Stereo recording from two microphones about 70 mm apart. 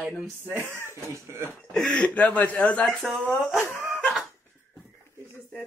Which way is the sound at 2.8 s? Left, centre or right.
Centre.